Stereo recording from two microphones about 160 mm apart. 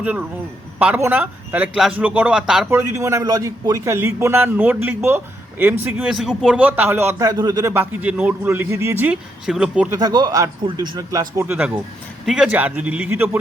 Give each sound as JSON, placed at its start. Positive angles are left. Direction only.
{"t": 0.0, "sound": "a man's voice", "side_deg": -10}
{"t": 2.6, "sound": "a man's voice", "side_deg": -15}
{"t": 9.9, "sound": "a man's voice", "side_deg": -25}